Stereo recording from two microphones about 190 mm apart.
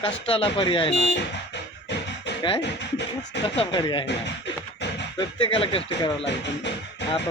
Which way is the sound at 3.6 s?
25° left (ahead or behind).